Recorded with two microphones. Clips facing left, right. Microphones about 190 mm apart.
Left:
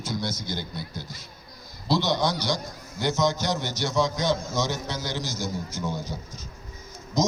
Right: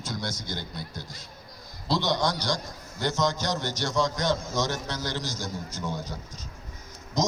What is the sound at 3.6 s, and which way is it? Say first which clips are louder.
A man's voice: left 1 dB; 15° right (ahead or behind).